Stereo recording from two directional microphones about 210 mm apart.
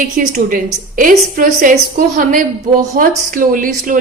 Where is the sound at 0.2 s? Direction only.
40° right (ahead or behind).